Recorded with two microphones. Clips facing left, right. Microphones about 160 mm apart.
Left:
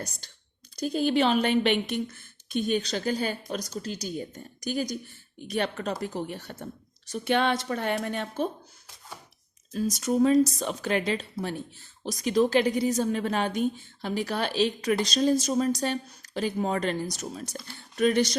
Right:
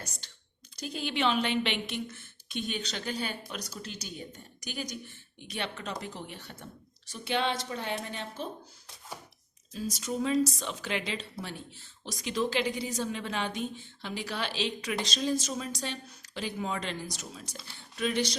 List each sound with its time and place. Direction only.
0.2 s a woman's voice: 45° left (ahead or behind)
9.7 s a woman's voice: 45° left (ahead or behind)